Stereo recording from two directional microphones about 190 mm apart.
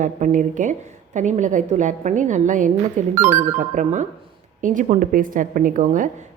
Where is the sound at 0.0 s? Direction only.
40° right (ahead or behind).